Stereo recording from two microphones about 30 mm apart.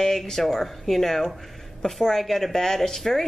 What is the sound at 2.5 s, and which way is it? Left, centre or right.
Speech, centre.